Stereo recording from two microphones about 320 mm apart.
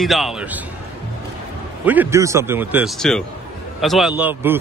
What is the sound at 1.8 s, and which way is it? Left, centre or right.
A man's voice, centre.